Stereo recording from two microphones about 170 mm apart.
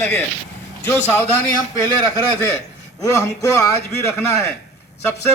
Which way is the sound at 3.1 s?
20° left (ahead or behind).